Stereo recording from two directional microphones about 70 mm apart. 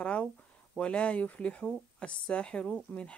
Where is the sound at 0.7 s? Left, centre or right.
Centre.